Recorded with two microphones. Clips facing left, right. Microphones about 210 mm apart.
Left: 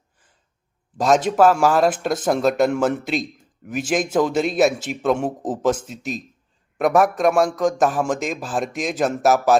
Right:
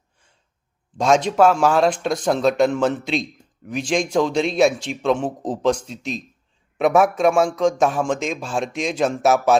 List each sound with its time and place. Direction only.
0.9 s speech: 5° left (ahead or behind)